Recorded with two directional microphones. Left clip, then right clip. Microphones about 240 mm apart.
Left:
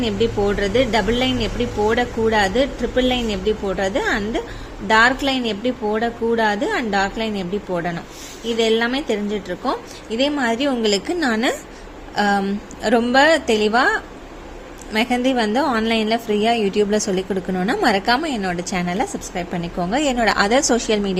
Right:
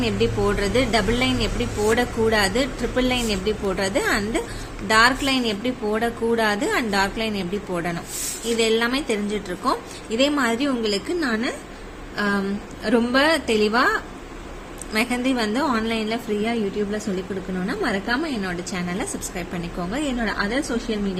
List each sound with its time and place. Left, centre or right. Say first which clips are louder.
0.0 s a woman's voice: left 2 dB; centre; by 21.0 s left